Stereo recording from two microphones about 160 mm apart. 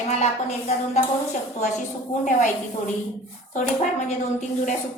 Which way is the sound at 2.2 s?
50° left (ahead or behind).